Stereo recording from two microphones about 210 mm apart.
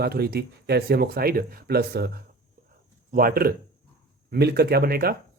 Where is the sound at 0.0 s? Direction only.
50° right (ahead or behind).